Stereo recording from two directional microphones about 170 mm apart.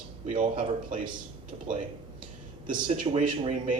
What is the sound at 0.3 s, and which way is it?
Speech, 50° right (ahead or behind).